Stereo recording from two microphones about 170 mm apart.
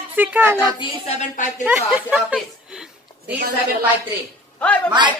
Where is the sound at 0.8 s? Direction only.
40° left (ahead or behind).